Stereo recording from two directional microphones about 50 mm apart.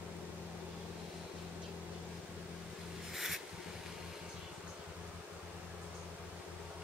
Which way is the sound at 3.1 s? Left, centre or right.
Centre.